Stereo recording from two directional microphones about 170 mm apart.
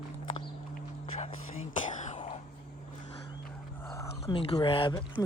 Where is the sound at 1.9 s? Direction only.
45° left (ahead or behind).